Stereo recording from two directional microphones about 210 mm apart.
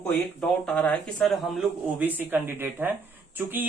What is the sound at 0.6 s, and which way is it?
Speech, 5° left (ahead or behind).